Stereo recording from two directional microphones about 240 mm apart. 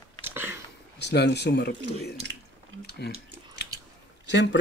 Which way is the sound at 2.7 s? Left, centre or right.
Right.